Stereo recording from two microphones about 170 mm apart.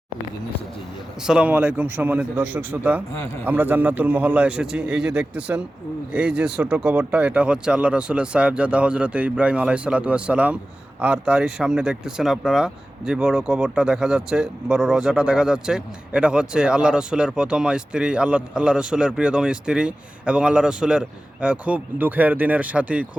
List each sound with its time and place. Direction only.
1.2 s speech: 5° right (ahead or behind)